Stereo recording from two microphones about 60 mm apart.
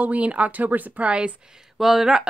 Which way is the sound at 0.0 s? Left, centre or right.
Right.